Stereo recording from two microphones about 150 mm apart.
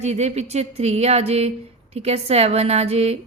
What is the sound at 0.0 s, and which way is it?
Speech, 50° right (ahead or behind).